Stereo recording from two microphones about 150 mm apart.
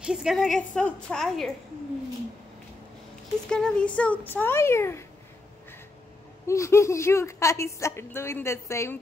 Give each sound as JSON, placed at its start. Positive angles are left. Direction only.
{"t": 0.0, "sound": "a woman's voice", "side_deg": -5}
{"t": 3.4, "sound": "speech", "side_deg": 5}
{"t": 6.4, "sound": "a woman's voice", "side_deg": 20}